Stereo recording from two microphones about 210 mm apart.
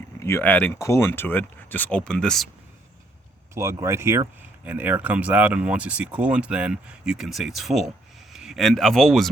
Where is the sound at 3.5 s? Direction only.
15° right (ahead or behind).